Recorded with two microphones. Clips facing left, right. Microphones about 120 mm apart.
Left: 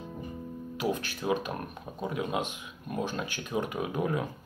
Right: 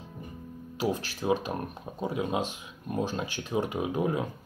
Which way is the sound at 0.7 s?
30° right (ahead or behind).